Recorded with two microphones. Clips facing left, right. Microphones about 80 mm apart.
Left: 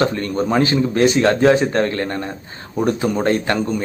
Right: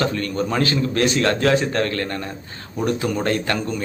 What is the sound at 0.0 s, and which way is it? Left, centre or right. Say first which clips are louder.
A man's voice: left 3 dB; left.